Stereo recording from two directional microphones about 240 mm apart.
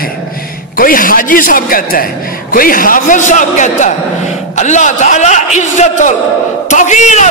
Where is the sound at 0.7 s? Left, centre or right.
Left.